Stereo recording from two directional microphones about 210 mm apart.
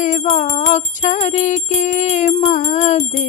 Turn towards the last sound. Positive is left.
turn(degrees=30)  # may be behind; listen again after turning